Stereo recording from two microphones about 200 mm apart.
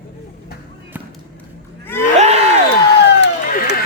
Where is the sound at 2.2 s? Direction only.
30° right (ahead or behind).